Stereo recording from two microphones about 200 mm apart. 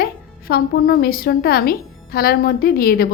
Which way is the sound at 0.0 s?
50° left (ahead or behind).